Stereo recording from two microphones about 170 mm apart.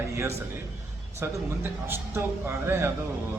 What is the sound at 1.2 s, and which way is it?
A man's voice, 15° right (ahead or behind).